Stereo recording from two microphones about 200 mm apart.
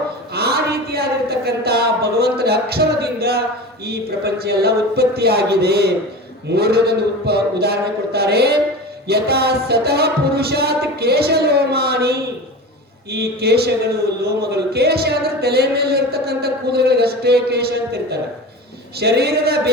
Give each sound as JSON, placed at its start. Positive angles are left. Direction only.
{"t": 0.3, "sound": "a man's voice", "side_deg": -50}